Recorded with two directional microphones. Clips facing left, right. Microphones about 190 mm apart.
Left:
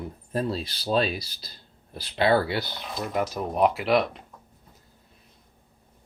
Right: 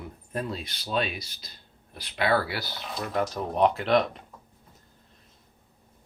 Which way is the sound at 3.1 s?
10° left (ahead or behind).